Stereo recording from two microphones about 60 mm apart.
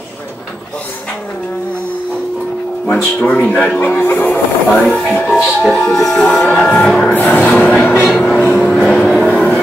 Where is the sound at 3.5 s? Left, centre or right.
Left.